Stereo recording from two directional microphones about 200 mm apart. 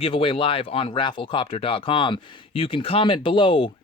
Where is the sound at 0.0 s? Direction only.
25° left (ahead or behind).